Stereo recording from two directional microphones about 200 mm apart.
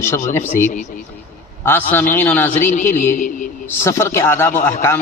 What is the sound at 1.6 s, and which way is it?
A man's voice, 10° left (ahead or behind).